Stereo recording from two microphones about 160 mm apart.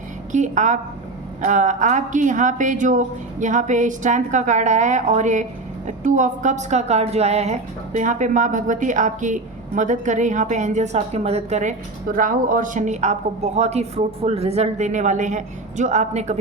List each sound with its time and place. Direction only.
0.3 s a woman's voice: 50° right (ahead or behind)